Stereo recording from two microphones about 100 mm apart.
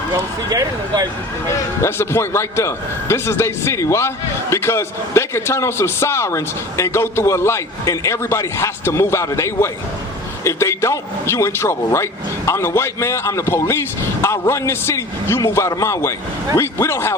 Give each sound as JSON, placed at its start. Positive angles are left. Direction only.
{"t": 0.1, "sound": "speech", "side_deg": -40}
{"t": 1.8, "sound": "a man's voice", "side_deg": 25}